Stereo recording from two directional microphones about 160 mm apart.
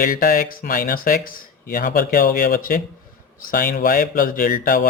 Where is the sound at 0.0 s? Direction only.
65° left (ahead or behind).